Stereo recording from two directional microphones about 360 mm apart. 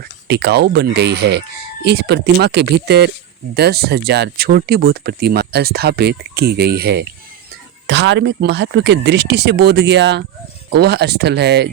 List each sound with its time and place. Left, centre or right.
0.3 s speech: right